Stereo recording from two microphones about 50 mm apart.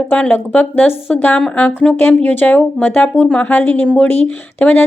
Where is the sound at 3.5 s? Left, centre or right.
Left.